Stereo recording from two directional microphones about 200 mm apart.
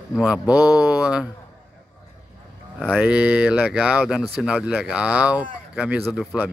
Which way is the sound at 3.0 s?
5° right (ahead or behind).